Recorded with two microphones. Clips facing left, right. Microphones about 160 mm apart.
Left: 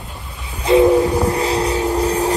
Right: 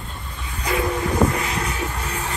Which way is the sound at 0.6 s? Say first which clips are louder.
Left 12 dB; 20° left (ahead or behind).